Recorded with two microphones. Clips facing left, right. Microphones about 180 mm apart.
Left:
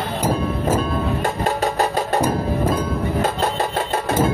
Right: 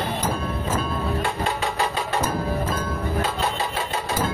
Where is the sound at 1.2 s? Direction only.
45° left (ahead or behind).